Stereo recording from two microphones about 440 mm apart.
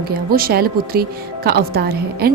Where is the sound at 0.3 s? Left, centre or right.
Centre.